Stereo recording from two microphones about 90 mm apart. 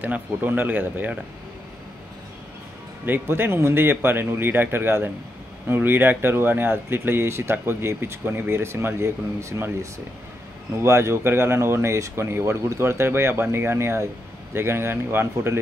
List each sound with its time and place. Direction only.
0.0 s speech: 20° right (ahead or behind)
3.1 s speech: 25° right (ahead or behind)